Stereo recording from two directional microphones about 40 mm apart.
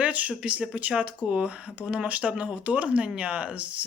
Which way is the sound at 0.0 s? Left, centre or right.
Right.